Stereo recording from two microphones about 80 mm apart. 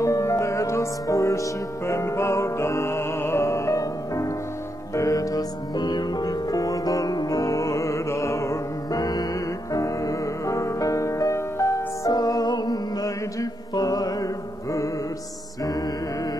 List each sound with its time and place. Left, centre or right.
0.0 s music: left
12.1 s music: left